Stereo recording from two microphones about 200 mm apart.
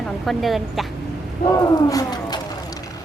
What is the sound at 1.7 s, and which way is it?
Speech, 20° left (ahead or behind).